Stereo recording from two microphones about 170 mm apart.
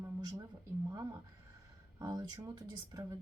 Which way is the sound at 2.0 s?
25° right (ahead or behind).